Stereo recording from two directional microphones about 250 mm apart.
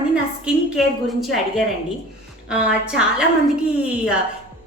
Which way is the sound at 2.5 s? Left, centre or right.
Centre.